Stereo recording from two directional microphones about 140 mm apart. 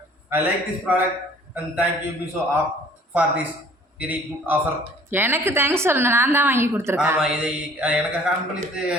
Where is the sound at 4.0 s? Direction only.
15° right (ahead or behind).